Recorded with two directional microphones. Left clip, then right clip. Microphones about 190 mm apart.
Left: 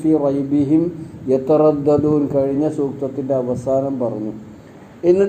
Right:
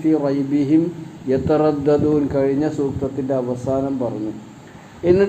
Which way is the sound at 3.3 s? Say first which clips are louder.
Left 4 dB; 20° left (ahead or behind).